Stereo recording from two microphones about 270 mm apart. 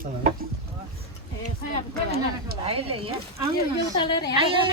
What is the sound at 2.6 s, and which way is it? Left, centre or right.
Speech, right.